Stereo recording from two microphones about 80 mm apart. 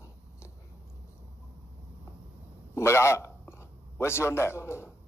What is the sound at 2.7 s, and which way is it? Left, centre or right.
A man's voice, left.